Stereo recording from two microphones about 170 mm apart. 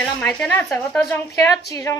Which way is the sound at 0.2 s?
5° left (ahead or behind).